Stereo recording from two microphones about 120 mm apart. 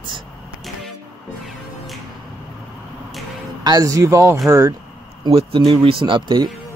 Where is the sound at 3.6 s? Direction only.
30° right (ahead or behind).